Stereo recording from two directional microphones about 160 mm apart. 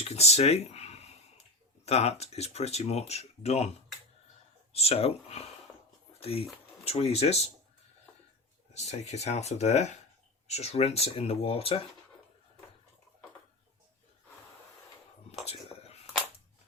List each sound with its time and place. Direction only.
0.0 s speech: 40° left (ahead or behind)
4.7 s speech: 40° left (ahead or behind)
8.7 s speech: 45° left (ahead or behind)
15.4 s a sound: 40° left (ahead or behind)